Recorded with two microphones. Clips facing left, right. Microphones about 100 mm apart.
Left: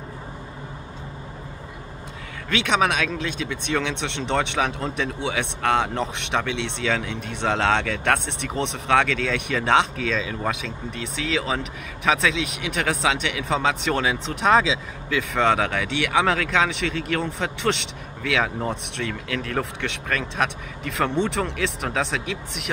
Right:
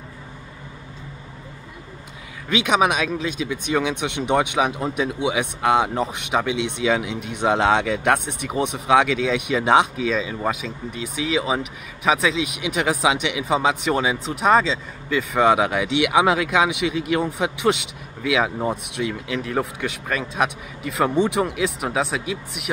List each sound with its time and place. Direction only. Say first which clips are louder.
2.5 s speech: right 2 dB; 10° right (ahead or behind)